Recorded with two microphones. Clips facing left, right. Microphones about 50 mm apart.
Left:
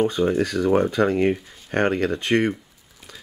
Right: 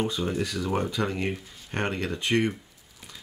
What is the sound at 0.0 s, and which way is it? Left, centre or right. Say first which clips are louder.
Speech: left 8 dB; left.